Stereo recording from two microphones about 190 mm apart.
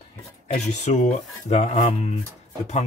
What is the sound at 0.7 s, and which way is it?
Speech, 40° left (ahead or behind).